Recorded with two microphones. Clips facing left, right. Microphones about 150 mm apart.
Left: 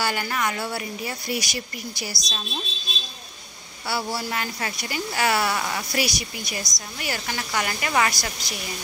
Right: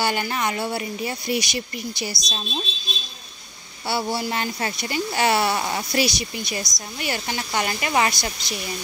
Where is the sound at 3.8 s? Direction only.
25° right (ahead or behind).